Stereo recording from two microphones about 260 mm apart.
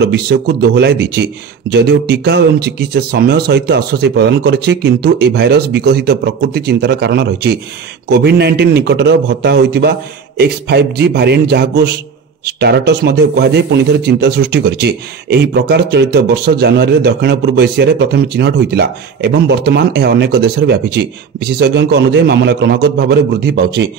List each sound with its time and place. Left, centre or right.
0.0 s speech: right